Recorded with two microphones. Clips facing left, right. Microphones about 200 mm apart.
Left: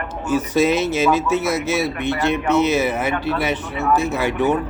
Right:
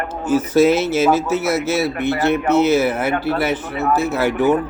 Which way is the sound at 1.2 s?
5° right (ahead or behind).